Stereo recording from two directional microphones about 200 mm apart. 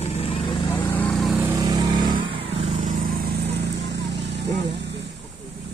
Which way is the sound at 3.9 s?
60° right (ahead or behind).